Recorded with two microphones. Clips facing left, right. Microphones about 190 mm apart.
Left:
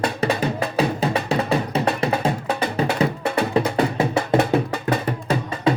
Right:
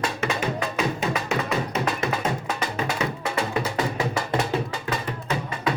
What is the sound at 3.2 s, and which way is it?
Music, 60° left (ahead or behind).